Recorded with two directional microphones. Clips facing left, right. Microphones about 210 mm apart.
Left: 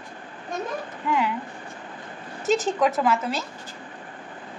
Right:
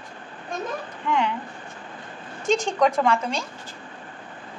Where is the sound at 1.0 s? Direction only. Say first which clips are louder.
Right 1 dB; 5° left (ahead or behind).